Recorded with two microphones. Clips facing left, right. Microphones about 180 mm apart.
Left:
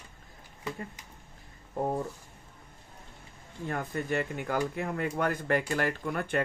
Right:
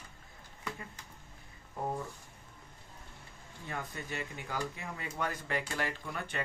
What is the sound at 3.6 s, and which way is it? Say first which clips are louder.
Speech: left 8 dB; 55° left (ahead or behind).